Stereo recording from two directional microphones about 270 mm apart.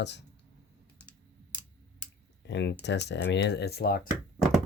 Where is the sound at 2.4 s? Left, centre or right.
Left.